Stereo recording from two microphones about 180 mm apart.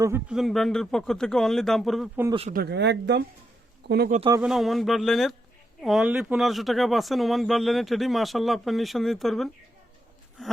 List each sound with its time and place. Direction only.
0.0 s a man's voice: 15° right (ahead or behind)
0.3 s speech: centre (ahead or behind)
2.5 s speech: 60° right (ahead or behind)
3.8 s speech: 65° right (ahead or behind)
4.4 s speech: centre (ahead or behind)